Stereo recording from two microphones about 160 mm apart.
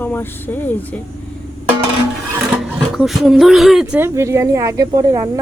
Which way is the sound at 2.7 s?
Centre (ahead or behind).